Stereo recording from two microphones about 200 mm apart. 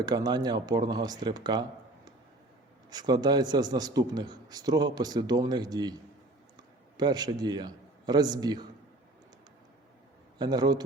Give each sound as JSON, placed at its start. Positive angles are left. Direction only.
{"t": 0.0, "sound": "a man's voice", "side_deg": -20}
{"t": 2.9, "sound": "a man's voice", "side_deg": -20}
{"t": 6.9, "sound": "a man's voice", "side_deg": -20}
{"t": 10.3, "sound": "a man's voice", "side_deg": -20}